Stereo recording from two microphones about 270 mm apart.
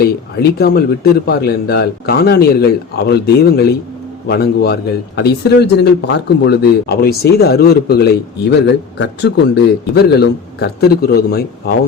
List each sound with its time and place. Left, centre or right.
0.0 s speech: left